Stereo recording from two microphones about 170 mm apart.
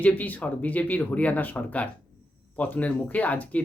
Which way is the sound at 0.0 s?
10° left (ahead or behind).